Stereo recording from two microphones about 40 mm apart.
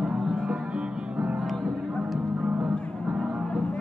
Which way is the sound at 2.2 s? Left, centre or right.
Right.